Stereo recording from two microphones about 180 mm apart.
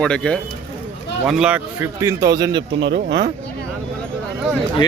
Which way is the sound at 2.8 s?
85° right.